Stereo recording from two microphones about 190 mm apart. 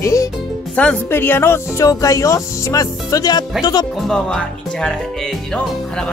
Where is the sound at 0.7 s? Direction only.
5° left (ahead or behind).